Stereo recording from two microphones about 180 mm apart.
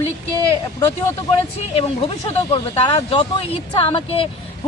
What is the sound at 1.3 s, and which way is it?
Speech, 30° left (ahead or behind).